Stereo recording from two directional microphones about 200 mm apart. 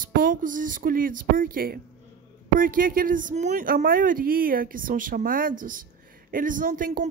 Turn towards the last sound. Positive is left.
turn(degrees=-40)  # may be behind; listen again after turning